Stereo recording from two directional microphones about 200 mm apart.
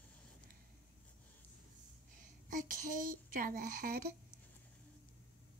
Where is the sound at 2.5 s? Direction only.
40° right (ahead or behind).